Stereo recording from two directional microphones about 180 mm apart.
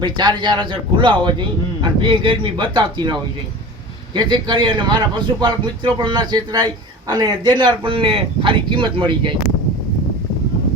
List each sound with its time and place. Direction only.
0.0 s a man's voice: 25° right (ahead or behind)